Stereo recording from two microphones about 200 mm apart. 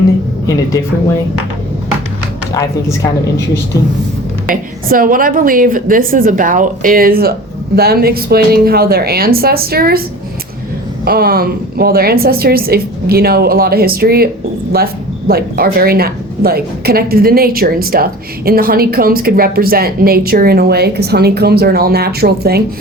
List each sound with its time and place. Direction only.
2.5 s a woman's voice: 15° left (ahead or behind)
4.4 s a woman's voice: 45° right (ahead or behind)
11.0 s a woman's voice: 50° right (ahead or behind)
15.3 s a woman's voice: 50° right (ahead or behind)